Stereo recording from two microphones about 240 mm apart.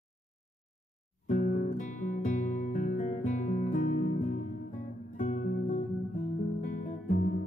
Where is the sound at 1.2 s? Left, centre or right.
Left.